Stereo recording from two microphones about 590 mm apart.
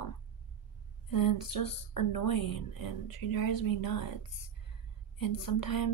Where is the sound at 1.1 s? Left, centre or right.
Left.